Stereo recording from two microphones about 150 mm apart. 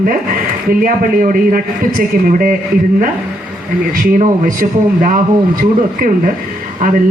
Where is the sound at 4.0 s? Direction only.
60° right (ahead or behind).